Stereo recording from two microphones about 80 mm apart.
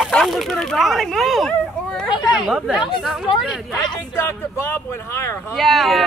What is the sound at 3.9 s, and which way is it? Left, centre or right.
Speech, left.